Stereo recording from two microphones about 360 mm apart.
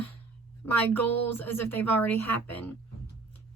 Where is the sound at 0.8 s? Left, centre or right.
Centre.